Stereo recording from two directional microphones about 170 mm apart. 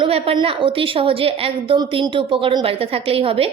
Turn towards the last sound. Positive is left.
turn(degrees=-35)  # may be behind; listen again after turning